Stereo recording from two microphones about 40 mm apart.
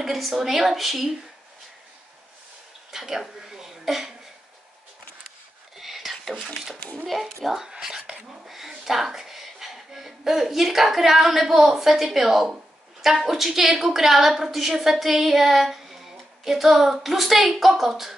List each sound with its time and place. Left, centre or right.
0.0 s a woman's voice: centre
2.9 s speech: centre
3.3 s chuckle: centre
5.8 s whispering: centre
7.1 s a woman's voice: centre
7.6 s a sound: centre
8.5 s a woman's voice: centre